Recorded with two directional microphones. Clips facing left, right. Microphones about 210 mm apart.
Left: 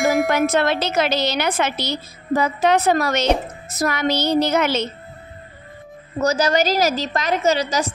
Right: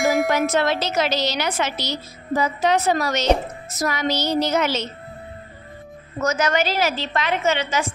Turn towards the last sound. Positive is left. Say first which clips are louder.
# left 3 dB
turn(degrees=40)  # may be behind; listen again after turning